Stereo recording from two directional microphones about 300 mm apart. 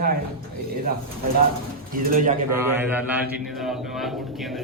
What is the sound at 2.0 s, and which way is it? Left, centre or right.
Speech, right.